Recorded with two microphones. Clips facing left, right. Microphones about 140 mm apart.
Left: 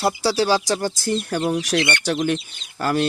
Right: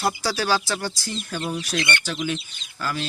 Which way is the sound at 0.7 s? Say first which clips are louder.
Left 7 dB; 45° left (ahead or behind).